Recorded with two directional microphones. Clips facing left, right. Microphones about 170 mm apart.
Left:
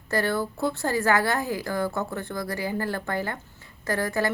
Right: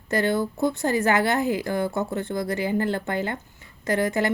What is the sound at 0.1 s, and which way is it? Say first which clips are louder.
Speech: right 3 dB; 20° right (ahead or behind).